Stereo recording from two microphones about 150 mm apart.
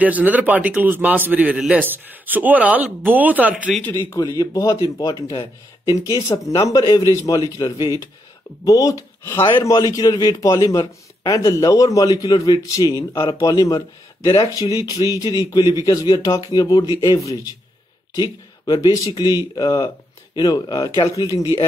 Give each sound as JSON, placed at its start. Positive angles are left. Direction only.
{"t": 0.0, "sound": "a man's voice", "side_deg": -10}
{"t": 4.4, "sound": "a man's voice", "side_deg": 25}
{"t": 16.8, "sound": "speech", "side_deg": -20}
{"t": 17.1, "sound": "a man's voice", "side_deg": 25}